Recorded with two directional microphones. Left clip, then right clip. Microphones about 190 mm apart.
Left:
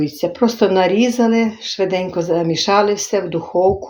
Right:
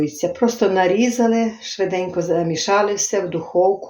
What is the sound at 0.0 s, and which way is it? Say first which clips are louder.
Speech: left 2 dB; 35° left (ahead or behind).